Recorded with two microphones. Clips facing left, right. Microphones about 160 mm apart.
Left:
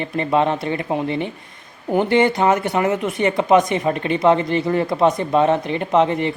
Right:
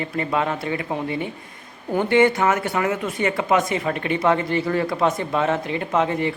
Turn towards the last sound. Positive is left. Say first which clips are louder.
# left 4 dB
turn(degrees=20)  # may be behind; listen again after turning